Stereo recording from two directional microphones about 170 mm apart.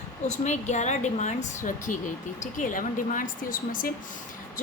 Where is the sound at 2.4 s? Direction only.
50° left (ahead or behind).